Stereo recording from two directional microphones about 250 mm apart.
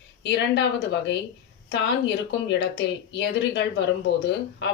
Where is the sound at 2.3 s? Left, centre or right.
Left.